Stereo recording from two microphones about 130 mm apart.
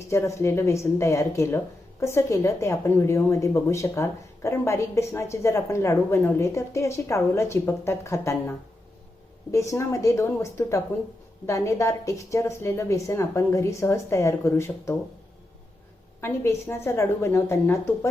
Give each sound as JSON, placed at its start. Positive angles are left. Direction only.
{"t": 0.1, "sound": "speech", "side_deg": 20}
{"t": 16.2, "sound": "speech", "side_deg": 20}